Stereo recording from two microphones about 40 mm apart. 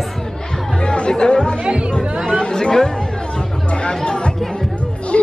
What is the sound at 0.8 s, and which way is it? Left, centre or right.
Speech, left.